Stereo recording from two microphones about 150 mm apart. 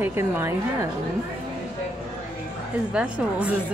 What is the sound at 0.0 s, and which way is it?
Speech, 15° right (ahead or behind).